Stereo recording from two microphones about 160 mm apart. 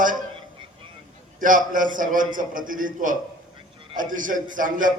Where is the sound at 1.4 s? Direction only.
55° right (ahead or behind).